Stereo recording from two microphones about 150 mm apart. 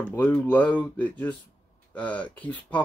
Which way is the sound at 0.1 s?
10° left (ahead or behind).